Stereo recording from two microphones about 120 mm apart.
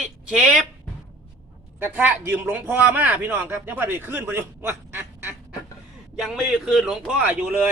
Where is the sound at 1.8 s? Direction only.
15° right (ahead or behind).